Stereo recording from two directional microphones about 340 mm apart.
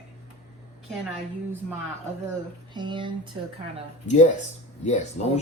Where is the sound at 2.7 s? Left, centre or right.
Centre.